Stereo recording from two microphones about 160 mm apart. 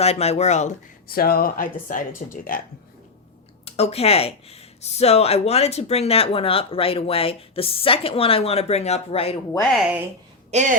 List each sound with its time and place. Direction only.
0.0 s speech: 40° left (ahead or behind)
1.0 s speech: 70° left (ahead or behind)
3.7 s speech: 40° left (ahead or behind)
10.5 s speech: 50° right (ahead or behind)